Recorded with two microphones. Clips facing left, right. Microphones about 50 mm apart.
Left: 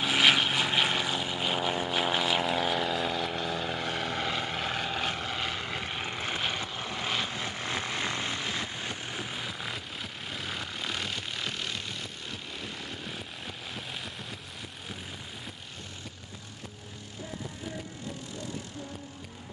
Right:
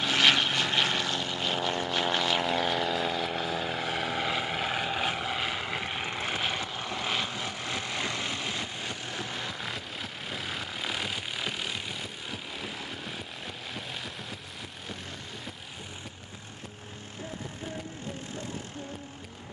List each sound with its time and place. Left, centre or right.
0.0 s vehicle: centre
8.0 s vehicle: left
8.4 s vehicle: centre
13.7 s a sound: centre